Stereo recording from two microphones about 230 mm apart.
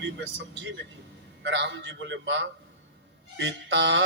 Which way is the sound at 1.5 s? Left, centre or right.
Right.